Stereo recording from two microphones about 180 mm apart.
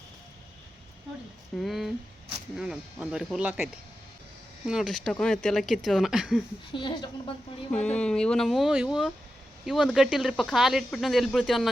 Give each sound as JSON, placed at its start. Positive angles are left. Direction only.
{"t": 1.5, "sound": "speech", "side_deg": 0}
{"t": 6.7, "sound": "a woman's voice", "side_deg": 25}
{"t": 7.7, "sound": "speech", "side_deg": 5}